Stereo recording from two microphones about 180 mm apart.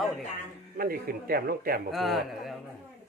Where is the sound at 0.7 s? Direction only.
55° right (ahead or behind).